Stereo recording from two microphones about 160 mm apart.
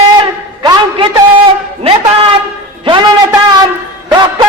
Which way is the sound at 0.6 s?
25° right (ahead or behind).